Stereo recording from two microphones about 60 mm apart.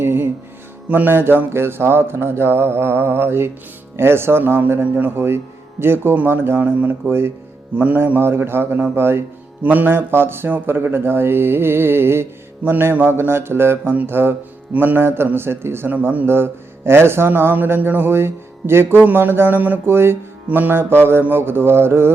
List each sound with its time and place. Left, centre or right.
0.0 s music: right
0.9 s speech: right
1.1 s speech: right
7.1 s speech: right
7.8 s speech: right
9.6 s a man's voice: right
15.9 s speech: right
16.2 s speech: right